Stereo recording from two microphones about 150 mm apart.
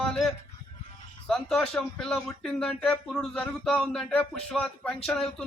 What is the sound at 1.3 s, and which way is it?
Speech, 5° left (ahead or behind).